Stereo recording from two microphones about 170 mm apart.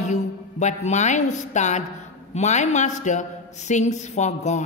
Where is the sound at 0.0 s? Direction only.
45° left (ahead or behind).